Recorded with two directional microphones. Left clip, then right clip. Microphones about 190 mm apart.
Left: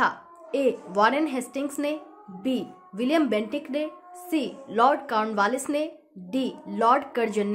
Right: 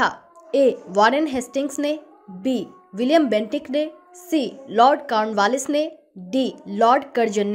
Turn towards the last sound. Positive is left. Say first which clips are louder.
# right 5 dB
turn(degrees=-20)  # may be behind; listen again after turning